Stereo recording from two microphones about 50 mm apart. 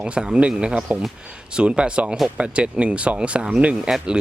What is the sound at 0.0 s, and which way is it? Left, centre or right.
Speech, centre.